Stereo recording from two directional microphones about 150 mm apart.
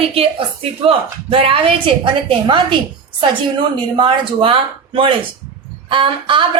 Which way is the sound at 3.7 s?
35° right (ahead or behind).